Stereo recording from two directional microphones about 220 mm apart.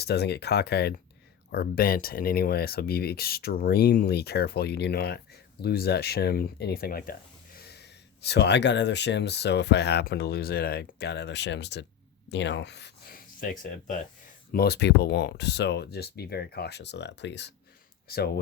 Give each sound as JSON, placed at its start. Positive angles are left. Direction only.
{"t": 0.0, "sound": "speech", "side_deg": 50}